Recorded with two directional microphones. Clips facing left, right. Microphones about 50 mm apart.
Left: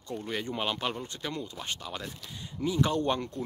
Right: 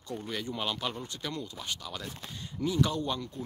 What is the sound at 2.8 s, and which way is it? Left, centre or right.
Speech, left.